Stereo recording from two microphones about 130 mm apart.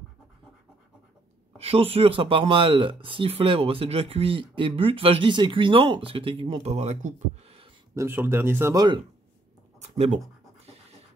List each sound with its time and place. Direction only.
1.6 s speech: 50° right (ahead or behind)
7.9 s speech: 20° right (ahead or behind)
8.7 s speech: 35° right (ahead or behind)
9.8 s speech: 55° right (ahead or behind)
10.6 s scratch: 55° right (ahead or behind)